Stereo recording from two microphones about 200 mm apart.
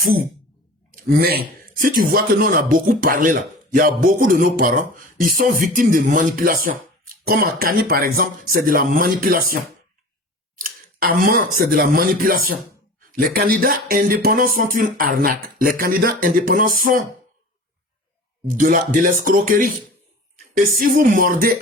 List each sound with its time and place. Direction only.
0.0 s speech: 45° right (ahead or behind)
10.6 s a sound: 45° right (ahead or behind)
11.5 s speech: 50° right (ahead or behind)
18.5 s speech: 40° right (ahead or behind)
20.7 s speech: 45° right (ahead or behind)